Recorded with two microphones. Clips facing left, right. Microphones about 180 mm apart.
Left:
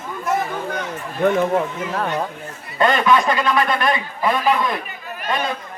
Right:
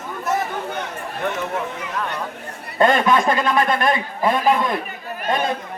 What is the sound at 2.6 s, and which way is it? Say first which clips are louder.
A man's voice: right 1 dB; 50° right (ahead or behind).